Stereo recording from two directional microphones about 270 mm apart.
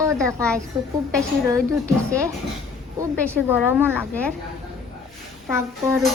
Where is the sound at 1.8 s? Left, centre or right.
Centre.